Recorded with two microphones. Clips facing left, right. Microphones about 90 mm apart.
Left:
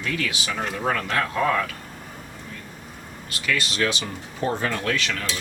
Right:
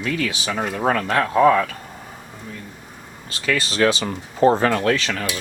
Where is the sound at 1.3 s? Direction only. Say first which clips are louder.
Right 9 dB; 30° right (ahead or behind).